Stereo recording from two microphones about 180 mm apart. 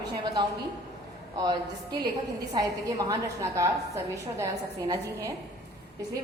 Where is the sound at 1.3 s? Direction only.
20° right (ahead or behind).